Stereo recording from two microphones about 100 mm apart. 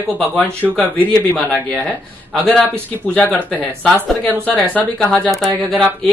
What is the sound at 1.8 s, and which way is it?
A man's voice, 10° left (ahead or behind).